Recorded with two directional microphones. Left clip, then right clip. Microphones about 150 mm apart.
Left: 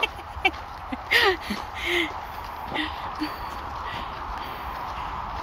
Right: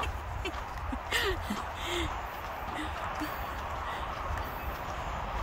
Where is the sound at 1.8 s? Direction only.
Centre (ahead or behind).